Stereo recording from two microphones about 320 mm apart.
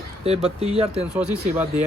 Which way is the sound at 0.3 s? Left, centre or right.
Centre.